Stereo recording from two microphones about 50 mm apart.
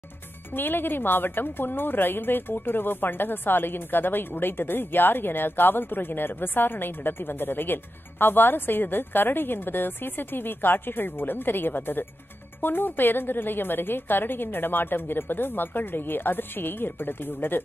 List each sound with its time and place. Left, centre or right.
0.5 s a woman's voice: left